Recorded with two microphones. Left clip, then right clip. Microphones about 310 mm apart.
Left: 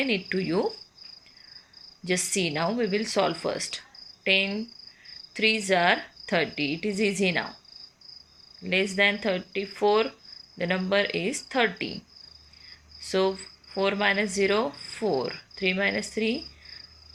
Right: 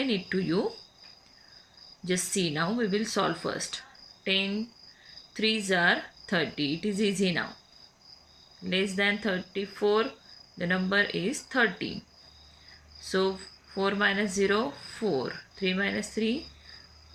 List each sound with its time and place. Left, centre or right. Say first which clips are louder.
0.0 s speech: left 3 dB; centre
2.0 s speech: left 3 dB; centre
8.7 s speech: left 4 dB; centre
13.0 s speech: left 3 dB; centre